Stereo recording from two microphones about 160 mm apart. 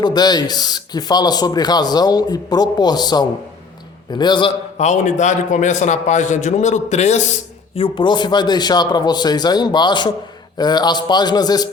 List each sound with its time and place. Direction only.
0.0 s speech: 25° left (ahead or behind)
4.8 s a man's voice: 50° left (ahead or behind)
7.8 s speech: 30° left (ahead or behind)